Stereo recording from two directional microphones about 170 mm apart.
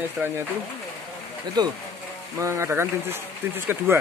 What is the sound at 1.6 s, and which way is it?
Speech, 25° right (ahead or behind).